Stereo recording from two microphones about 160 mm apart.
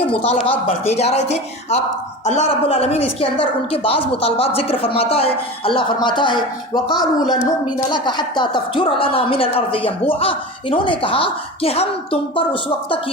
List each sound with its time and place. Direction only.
0.1 s speech: 35° left (ahead or behind)